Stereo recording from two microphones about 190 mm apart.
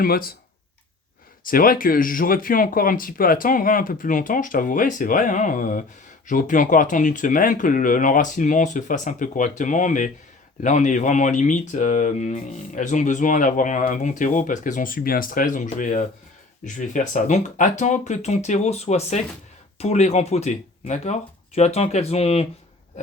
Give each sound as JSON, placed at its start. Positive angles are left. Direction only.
{"t": 0.0, "sound": "speech", "side_deg": 50}
{"t": 1.5, "sound": "speech", "side_deg": 50}